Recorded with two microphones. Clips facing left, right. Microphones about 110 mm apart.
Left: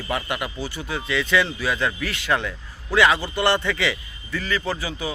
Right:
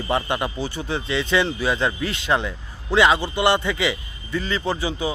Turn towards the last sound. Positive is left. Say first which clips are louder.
# right 3 dB
turn(degrees=-25)  # may be behind; listen again after turning